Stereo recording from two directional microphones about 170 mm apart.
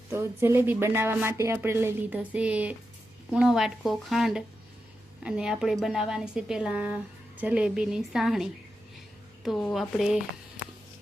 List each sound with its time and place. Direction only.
0.1 s a woman's voice: 15° right (ahead or behind)